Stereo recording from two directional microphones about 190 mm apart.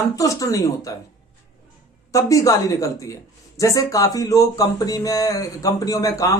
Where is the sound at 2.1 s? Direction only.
15° left (ahead or behind).